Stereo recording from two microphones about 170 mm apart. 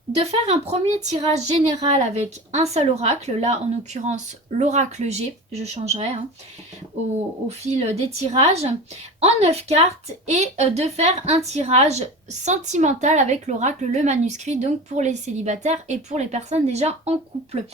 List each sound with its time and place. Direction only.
0.2 s a woman's voice: 35° right (ahead or behind)
7.4 s a woman's voice: 40° right (ahead or behind)